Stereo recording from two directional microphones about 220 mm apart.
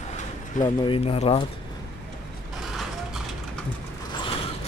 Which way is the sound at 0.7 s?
25° left (ahead or behind).